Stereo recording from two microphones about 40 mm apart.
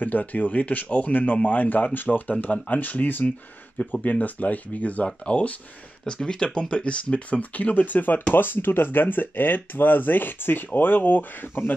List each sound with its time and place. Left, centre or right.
0.0 s speech: left
6.0 s speech: centre; by 8.2 s left
8.3 s speech: left